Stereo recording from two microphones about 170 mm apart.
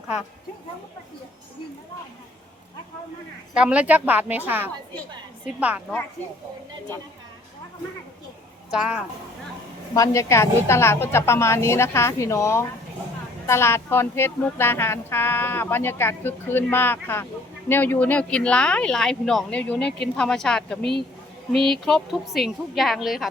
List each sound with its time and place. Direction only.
3.5 s speech: 5° right (ahead or behind)
8.7 s speech: 5° right (ahead or behind)
9.9 s speech: 20° left (ahead or behind); by 23.3 s centre (ahead or behind)